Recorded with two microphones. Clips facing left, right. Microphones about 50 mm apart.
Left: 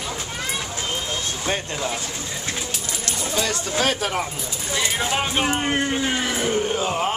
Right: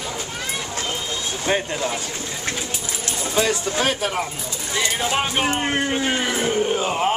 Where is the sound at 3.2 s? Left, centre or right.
Centre.